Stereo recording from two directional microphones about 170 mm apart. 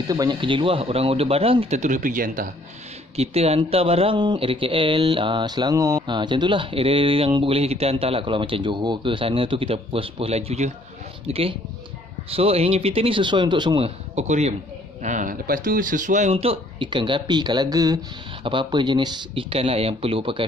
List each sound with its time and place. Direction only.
0.1 s speech: 25° right (ahead or behind); by 2.5 s 50° right (ahead or behind)
3.2 s speech: 35° right (ahead or behind)